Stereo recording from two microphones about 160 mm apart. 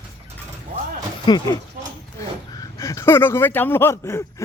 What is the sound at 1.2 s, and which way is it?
Speech, 25° left (ahead or behind).